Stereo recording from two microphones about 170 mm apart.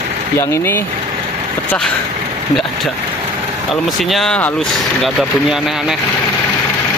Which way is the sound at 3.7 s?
Centre (ahead or behind).